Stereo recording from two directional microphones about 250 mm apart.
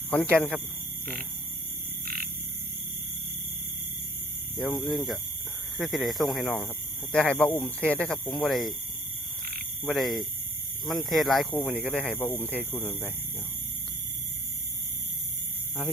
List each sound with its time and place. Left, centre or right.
0.1 s speech: centre
2.0 s frog: right
4.5 s speech: centre
9.4 s frog: right
9.8 s speech: centre